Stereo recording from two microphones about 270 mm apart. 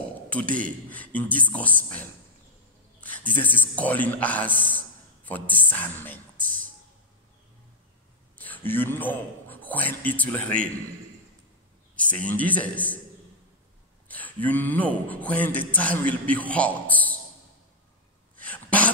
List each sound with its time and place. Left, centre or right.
0.5 s a man's voice: right
0.8 s a man's voice: centre
3.0 s a sound: centre
3.7 s a man's voice: centre
6.3 s a sound: right
8.4 s a man's voice: centre
11.9 s a man's voice: centre
14.0 s a man's voice: centre
18.4 s dog: centre